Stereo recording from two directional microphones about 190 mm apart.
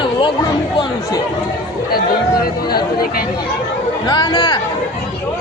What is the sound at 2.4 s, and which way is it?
Speech, 55° left (ahead or behind).